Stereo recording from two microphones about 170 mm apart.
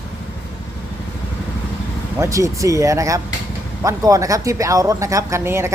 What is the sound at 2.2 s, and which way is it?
Speech, 20° right (ahead or behind).